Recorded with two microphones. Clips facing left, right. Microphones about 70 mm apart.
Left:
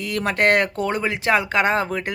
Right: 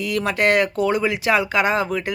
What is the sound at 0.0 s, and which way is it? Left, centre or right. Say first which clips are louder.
Speech: even; left.